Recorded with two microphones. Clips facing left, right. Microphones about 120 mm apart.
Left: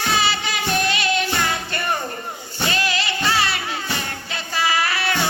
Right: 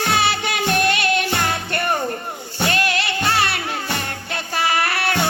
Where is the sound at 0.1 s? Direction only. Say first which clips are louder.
Even; 55° right (ahead or behind).